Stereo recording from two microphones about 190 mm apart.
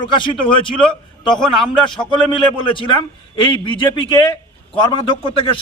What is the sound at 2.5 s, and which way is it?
Speech, 25° left (ahead or behind).